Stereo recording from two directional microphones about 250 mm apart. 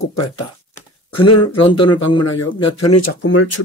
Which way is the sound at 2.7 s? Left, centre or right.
Left.